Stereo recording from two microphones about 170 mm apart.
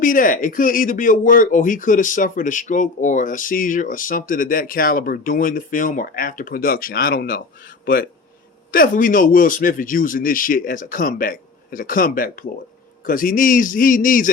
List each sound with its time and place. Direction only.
0.0 s speech: 50° left (ahead or behind)